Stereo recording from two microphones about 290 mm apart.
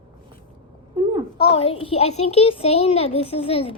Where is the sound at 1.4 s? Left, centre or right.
Centre.